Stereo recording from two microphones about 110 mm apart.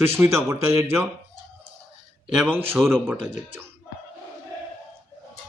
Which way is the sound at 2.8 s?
Centre (ahead or behind).